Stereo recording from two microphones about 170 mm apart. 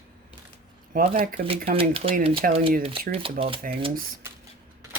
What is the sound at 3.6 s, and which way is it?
Speech, 50° right (ahead or behind).